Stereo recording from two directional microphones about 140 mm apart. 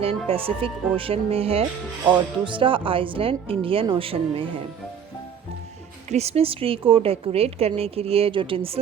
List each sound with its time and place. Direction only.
0.3 s a woman's voice: 40° right (ahead or behind)
6.1 s a woman's voice: 50° right (ahead or behind)